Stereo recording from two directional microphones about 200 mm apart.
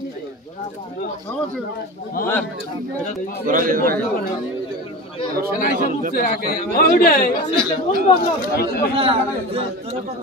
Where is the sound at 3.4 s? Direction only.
45° right (ahead or behind).